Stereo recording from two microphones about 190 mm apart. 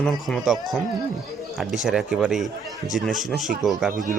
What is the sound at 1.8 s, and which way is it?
Speech, 5° right (ahead or behind).